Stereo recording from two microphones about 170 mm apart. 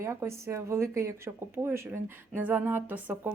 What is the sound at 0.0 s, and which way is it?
Speech, 15° right (ahead or behind).